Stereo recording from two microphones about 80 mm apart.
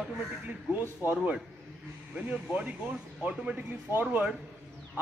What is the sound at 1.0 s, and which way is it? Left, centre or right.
Speech, right.